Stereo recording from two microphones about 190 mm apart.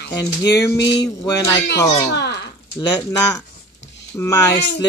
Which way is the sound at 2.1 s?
60° left (ahead or behind).